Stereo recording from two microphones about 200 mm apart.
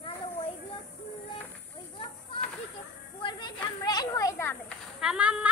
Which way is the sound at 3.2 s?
20° left (ahead or behind).